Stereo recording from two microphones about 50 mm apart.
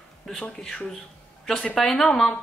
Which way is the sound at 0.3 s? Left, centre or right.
Centre.